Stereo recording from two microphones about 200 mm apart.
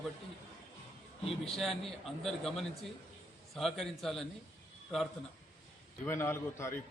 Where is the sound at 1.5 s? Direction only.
Centre (ahead or behind).